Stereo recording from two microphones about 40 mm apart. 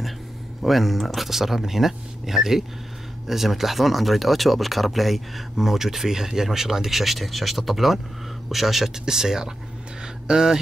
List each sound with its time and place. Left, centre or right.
0.6 s speech: centre